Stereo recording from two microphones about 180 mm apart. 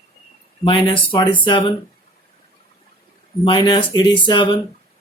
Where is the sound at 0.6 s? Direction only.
25° left (ahead or behind).